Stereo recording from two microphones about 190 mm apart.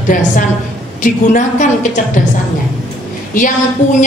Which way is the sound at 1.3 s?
40° left (ahead or behind).